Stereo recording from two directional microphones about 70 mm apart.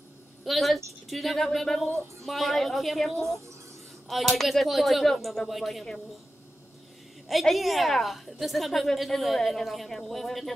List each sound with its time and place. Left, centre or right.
0.5 s a woman's voice: centre
3.1 s speech: right
4.1 s a woman's voice: centre
7.2 s a woman's voice: centre